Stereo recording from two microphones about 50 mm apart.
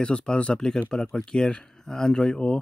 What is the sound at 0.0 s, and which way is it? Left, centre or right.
Speech, centre.